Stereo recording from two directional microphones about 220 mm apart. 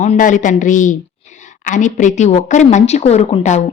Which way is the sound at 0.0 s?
35° left (ahead or behind).